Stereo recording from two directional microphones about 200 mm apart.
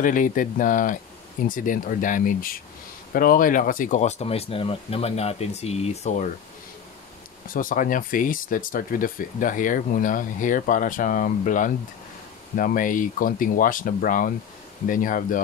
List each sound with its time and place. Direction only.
0.0 s speech: 40° left (ahead or behind)
7.5 s speech: 40° left (ahead or behind)